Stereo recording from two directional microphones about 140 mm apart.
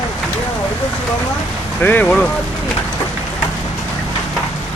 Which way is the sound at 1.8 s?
10° left (ahead or behind).